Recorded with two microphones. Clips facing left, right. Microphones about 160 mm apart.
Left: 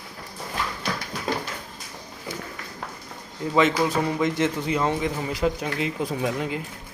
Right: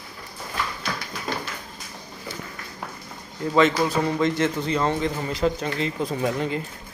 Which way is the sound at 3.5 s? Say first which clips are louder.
Right 1 dB; 15° left (ahead or behind).